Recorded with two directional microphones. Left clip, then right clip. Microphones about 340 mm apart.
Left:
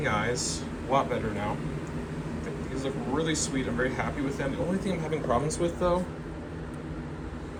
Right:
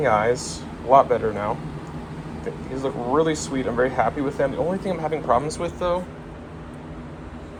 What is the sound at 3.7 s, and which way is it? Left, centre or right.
Speech, centre.